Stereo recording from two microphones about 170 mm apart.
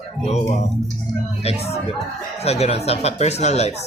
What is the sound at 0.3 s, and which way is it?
Speech, 40° left (ahead or behind).